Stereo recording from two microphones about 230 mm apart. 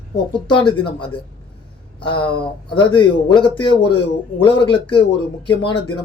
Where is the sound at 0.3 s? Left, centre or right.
Centre.